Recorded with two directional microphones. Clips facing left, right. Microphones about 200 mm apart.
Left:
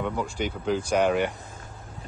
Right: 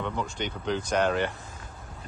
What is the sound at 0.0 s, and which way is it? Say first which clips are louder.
Speech: left 3 dB; 10° left (ahead or behind).